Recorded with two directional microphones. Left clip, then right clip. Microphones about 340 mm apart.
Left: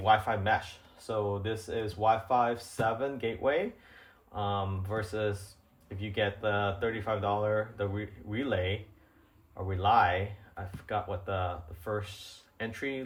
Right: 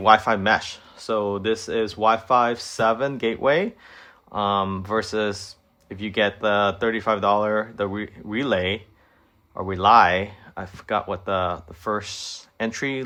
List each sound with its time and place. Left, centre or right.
0.0 s speech: centre
9.6 s speech: centre